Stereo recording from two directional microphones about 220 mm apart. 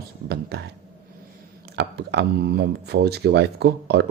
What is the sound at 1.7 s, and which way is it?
Speech, 50° right (ahead or behind).